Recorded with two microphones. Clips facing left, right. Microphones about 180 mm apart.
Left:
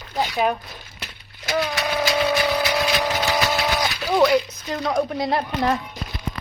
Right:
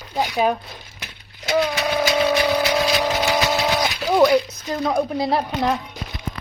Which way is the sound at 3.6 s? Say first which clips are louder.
Right 2 dB; 20° right (ahead or behind).